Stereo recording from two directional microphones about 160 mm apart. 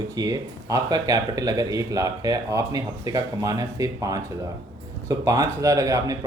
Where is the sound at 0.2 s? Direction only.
20° right (ahead or behind).